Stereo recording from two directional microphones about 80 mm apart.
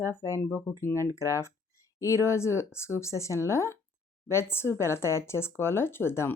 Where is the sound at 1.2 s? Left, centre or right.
Left.